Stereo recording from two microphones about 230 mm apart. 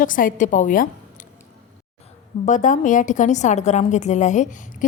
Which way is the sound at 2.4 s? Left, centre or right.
Left.